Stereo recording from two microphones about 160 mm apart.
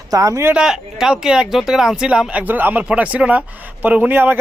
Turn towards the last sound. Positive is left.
turn(degrees=-10)  # may be behind; listen again after turning